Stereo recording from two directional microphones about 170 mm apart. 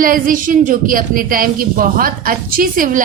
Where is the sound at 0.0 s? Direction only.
55° right (ahead or behind).